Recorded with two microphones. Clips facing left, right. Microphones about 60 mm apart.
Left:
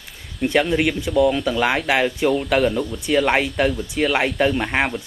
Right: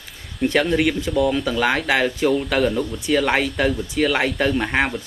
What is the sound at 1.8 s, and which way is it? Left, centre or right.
Speech, centre.